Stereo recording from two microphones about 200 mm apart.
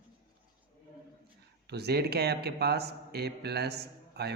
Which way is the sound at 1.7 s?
55° right (ahead or behind).